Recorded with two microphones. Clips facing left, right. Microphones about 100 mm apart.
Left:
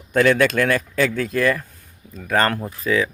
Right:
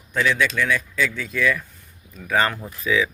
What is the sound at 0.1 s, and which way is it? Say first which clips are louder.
Speech: left 6 dB; 60° left (ahead or behind).